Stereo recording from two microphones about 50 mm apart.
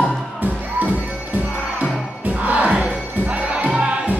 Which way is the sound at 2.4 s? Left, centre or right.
Right.